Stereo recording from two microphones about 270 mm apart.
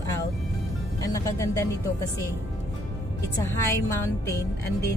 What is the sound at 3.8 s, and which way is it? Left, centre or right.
Speech, centre.